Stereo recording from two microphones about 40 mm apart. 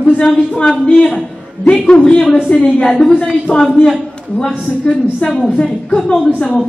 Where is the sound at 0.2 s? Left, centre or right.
Centre.